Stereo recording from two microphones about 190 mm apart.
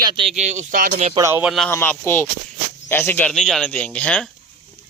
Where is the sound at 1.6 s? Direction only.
10° left (ahead or behind).